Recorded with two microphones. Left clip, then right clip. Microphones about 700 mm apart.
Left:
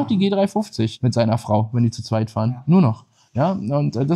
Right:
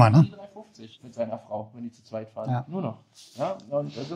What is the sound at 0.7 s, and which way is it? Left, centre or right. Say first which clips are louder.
Speech: left 8 dB; left.